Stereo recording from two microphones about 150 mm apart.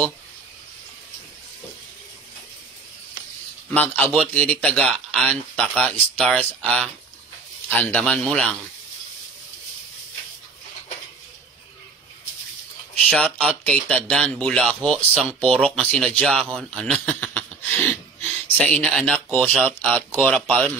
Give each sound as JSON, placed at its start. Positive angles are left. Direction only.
{"t": 3.7, "sound": "speech", "side_deg": 10}
{"t": 7.9, "sound": "speech", "side_deg": 10}
{"t": 13.1, "sound": "speech", "side_deg": 5}